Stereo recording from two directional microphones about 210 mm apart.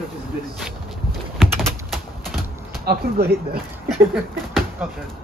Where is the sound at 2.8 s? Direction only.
45° right (ahead or behind).